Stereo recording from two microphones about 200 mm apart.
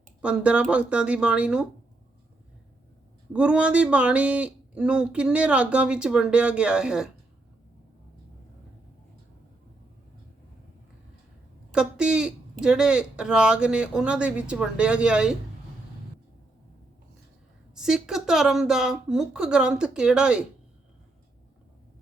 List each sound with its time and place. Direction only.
0.2 s speech: 5° right (ahead or behind)
3.3 s speech: 5° right (ahead or behind)
11.7 s speech: 5° right (ahead or behind)
17.7 s speech: 5° right (ahead or behind)